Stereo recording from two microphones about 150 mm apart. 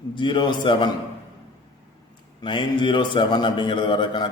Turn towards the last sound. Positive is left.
turn(degrees=30)  # may be behind; listen again after turning